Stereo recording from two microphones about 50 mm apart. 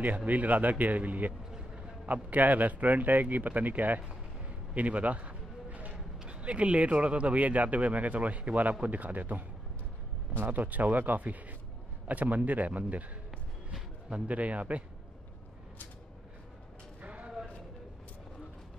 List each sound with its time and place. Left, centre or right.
0.0 s speech: right
4.7 s a sound: right
6.2 s speech: right
10.4 s speech: right
14.2 s speech: right
17.0 s a sound: right